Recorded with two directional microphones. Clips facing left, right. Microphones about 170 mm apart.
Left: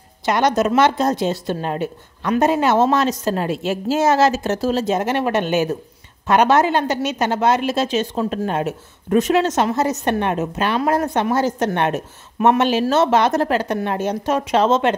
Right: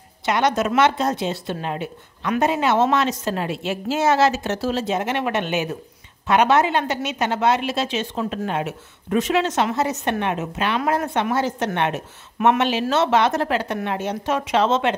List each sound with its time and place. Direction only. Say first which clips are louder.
0.2 s a woman's voice: left 3 dB; 40° left (ahead or behind)